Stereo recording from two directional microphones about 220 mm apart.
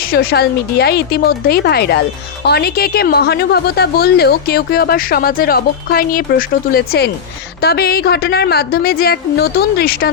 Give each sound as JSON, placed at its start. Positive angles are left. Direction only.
{"t": 0.0, "sound": "speech", "side_deg": 45}